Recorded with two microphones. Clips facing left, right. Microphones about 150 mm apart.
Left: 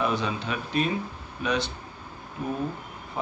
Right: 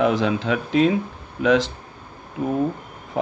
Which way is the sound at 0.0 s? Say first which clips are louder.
Right 8 dB; 90° right.